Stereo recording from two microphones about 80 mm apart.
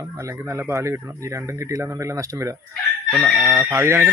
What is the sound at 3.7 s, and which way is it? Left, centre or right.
Speech, right.